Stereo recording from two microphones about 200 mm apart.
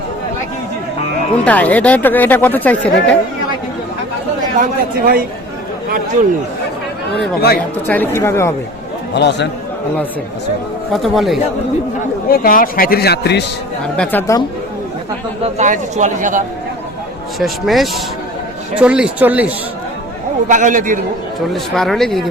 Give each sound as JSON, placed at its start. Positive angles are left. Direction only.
{"t": 1.5, "sound": "speech", "side_deg": 10}
{"t": 4.5, "sound": "speech", "side_deg": -45}
{"t": 7.9, "sound": "speech", "side_deg": 10}
{"t": 9.1, "sound": "a man's voice", "side_deg": 60}
{"t": 10.9, "sound": "speech", "side_deg": 0}
{"t": 12.3, "sound": "speech", "side_deg": 45}
{"t": 13.9, "sound": "speech", "side_deg": 5}
{"t": 15.5, "sound": "speech", "side_deg": -40}
{"t": 17.4, "sound": "speech", "side_deg": 0}
{"t": 20.5, "sound": "speech", "side_deg": -40}
{"t": 21.5, "sound": "speech", "side_deg": 0}